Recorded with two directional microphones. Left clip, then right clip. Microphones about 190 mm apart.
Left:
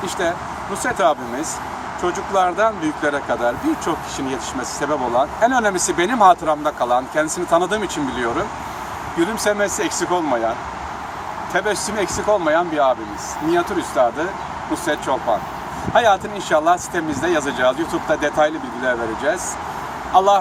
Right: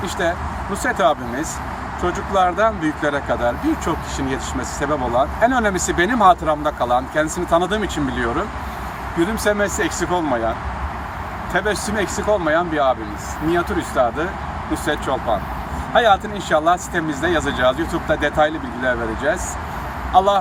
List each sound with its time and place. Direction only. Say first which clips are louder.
0.9 s speech: even; 15° right (ahead or behind)
11.5 s speech: even; 10° right (ahead or behind)
15.9 s speech: even; 15° right (ahead or behind)